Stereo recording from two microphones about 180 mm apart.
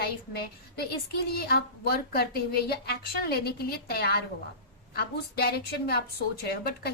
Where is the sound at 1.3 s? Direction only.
60° left (ahead or behind).